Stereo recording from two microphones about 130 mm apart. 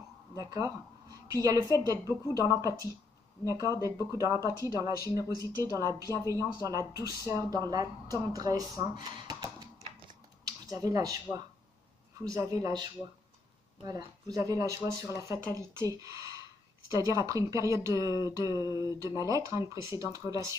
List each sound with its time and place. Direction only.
0.4 s speech: 30° right (ahead or behind)
14.3 s speech: 25° right (ahead or behind)